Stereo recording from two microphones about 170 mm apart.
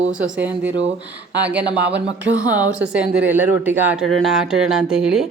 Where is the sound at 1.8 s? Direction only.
90° right.